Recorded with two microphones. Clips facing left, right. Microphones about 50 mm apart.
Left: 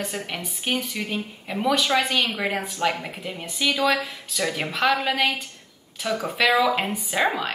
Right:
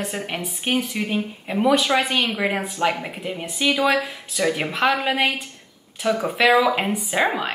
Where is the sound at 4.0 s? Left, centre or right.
Centre.